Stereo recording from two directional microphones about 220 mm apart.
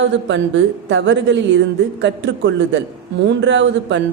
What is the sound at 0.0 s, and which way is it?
A woman's voice, 55° right (ahead or behind).